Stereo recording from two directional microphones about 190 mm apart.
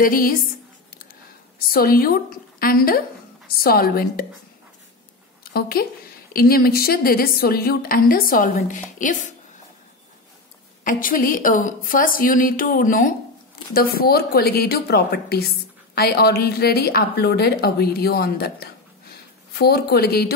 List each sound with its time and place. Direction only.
0.0 s a woman's voice: 50° left (ahead or behind)
1.7 s a woman's voice: 50° left (ahead or behind)
5.4 s a woman's voice: 50° left (ahead or behind)
10.8 s a woman's voice: 45° left (ahead or behind)